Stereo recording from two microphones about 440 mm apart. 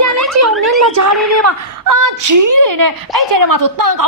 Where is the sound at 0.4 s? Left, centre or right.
Right.